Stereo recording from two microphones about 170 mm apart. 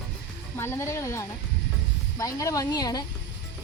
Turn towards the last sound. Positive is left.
turn(degrees=25)  # may be behind; listen again after turning